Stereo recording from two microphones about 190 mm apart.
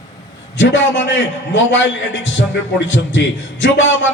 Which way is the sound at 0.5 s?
75° left (ahead or behind).